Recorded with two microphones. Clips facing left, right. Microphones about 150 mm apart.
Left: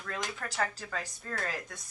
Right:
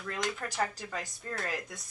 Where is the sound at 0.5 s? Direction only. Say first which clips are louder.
Right 1 dB; 15° right (ahead or behind).